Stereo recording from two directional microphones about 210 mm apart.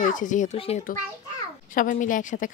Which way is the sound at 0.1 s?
35° left (ahead or behind).